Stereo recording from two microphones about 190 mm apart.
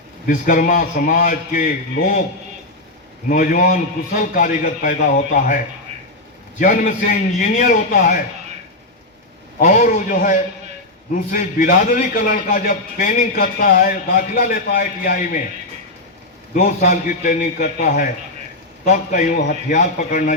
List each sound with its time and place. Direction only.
0.3 s a man's voice: 45° left (ahead or behind)
3.2 s a man's voice: 45° left (ahead or behind)
6.6 s a man's voice: 45° left (ahead or behind)
9.6 s a man's voice: 45° left (ahead or behind)
16.6 s a man's voice: 40° left (ahead or behind)